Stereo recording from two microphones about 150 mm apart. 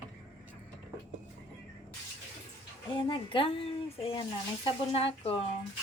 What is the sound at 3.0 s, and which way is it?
A woman's voice, 35° left (ahead or behind).